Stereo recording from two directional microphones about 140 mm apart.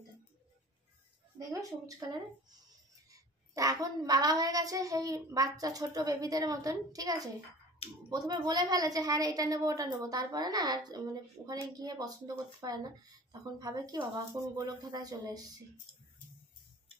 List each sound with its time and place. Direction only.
1.5 s a child's voice: 25° right (ahead or behind)